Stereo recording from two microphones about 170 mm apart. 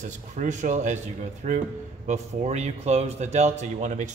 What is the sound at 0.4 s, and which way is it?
Speech, 45° right (ahead or behind).